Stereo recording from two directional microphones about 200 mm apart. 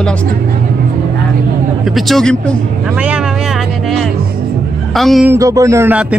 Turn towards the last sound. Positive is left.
turn(degrees=-10)  # may be behind; listen again after turning